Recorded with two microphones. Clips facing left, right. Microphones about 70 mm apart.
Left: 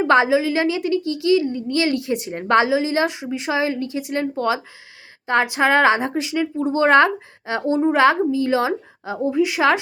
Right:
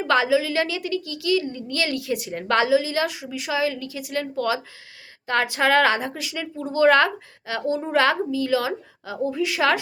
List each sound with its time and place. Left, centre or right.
0.0 s a woman's voice: left